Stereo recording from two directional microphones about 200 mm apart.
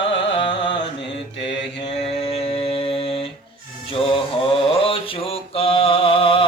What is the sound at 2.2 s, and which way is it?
Music, 30° left (ahead or behind).